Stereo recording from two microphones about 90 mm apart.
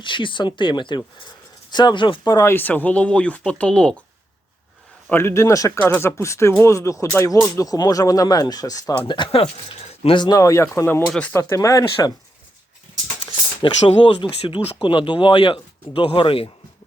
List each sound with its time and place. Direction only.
0.0 s speech: 65° left (ahead or behind)
2.3 s speech: 30° left (ahead or behind); by 3.9 s 10° left (ahead or behind)
5.1 s speech: 30° left (ahead or behind)
5.8 s speech: 25° left (ahead or behind); by 9.0 s 45° left (ahead or behind)
9.0 s speech: 60° left (ahead or behind); by 10.2 s 85° left
10.2 s speech: 35° left (ahead or behind)
11.0 s speech: 10° left (ahead or behind)
11.3 s speech: 30° left (ahead or behind)
13.6 s speech: 65° left (ahead or behind); by 16.5 s 80° left